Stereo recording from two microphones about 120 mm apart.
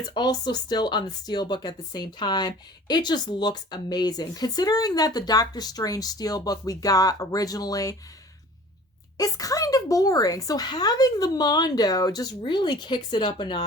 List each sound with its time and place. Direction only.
0.1 s speech: 35° left (ahead or behind)
9.1 s speech: 30° left (ahead or behind)